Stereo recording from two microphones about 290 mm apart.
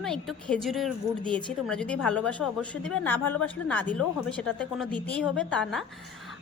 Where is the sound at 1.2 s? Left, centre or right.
Centre.